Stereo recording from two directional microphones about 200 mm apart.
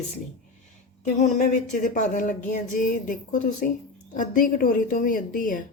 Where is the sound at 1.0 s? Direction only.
35° left (ahead or behind).